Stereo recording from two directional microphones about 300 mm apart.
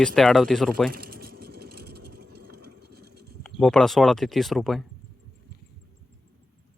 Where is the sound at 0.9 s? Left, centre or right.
Right.